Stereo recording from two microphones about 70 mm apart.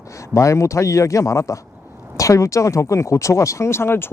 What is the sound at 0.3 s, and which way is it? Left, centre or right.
Speech, left.